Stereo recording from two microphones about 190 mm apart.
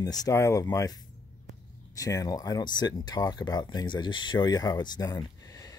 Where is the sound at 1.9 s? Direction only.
20° left (ahead or behind).